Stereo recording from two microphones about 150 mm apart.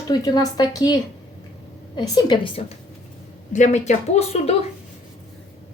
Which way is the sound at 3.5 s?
55° left (ahead or behind).